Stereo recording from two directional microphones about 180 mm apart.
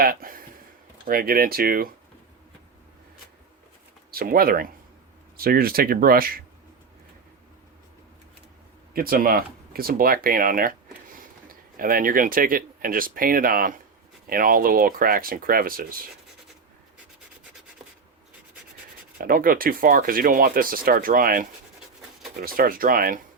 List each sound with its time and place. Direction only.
0.0 s a sound: 55° right (ahead or behind)
1.0 s speech: 55° right (ahead or behind)
4.1 s speech: 55° right (ahead or behind)
8.9 s speech: 55° right (ahead or behind)
19.2 s speech: 50° right (ahead or behind)